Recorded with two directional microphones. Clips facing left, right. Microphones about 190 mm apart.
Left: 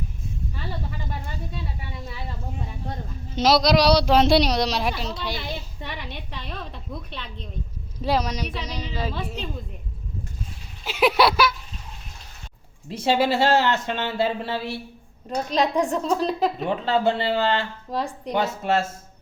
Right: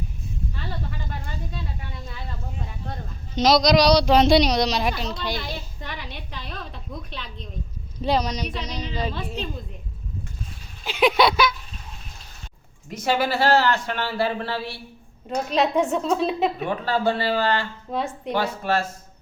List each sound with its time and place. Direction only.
3.3 s speech: 5° left (ahead or behind)
6.0 s a woman's voice: 10° right (ahead or behind)
8.0 s speech: 5° left (ahead or behind)
10.8 s speech: 5° left (ahead or behind)
12.9 s speech: 25° left (ahead or behind)
15.3 s speech: 5° right (ahead or behind)
16.6 s speech: 25° left (ahead or behind)
17.9 s speech: centre (ahead or behind)
18.3 s speech: 20° left (ahead or behind)